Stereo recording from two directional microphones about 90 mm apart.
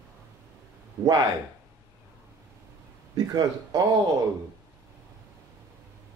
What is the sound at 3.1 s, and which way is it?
Speech, 45° right (ahead or behind).